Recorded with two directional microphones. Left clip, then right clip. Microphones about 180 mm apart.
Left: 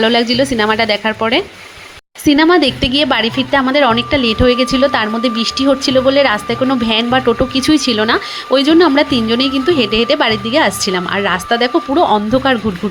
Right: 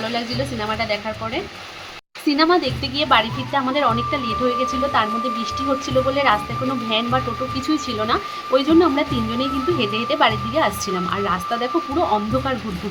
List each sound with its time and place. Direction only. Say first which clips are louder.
0.0 s speech: left 12 dB; 45° left (ahead or behind)